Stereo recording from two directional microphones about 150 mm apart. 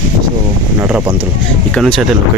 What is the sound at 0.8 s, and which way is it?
Speech, 15° right (ahead or behind).